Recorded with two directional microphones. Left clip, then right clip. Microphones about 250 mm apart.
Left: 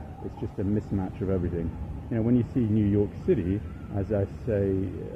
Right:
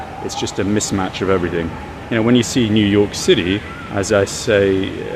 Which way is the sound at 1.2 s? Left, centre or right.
Centre.